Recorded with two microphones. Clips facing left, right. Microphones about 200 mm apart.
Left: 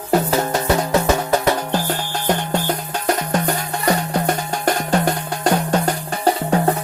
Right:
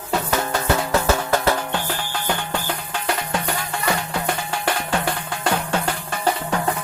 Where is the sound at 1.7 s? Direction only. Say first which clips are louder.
Left 4 dB; 40° left (ahead or behind).